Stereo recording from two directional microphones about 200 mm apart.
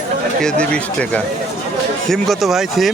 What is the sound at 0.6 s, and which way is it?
A man's voice, 5° left (ahead or behind).